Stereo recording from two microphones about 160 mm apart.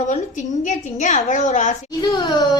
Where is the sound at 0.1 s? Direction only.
50° left (ahead or behind).